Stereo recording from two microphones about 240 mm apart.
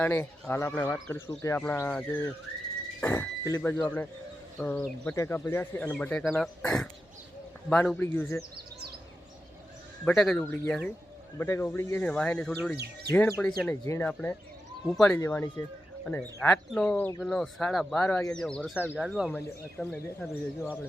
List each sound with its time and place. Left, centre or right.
0.0 s speech: centre
10.0 s speech: centre
12.7 s speech: right
13.1 s speech: centre